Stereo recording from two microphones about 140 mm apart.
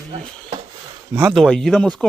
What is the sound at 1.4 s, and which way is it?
Speech, 5° left (ahead or behind).